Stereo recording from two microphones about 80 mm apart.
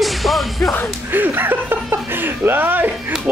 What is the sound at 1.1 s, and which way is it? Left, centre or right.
Speech, right.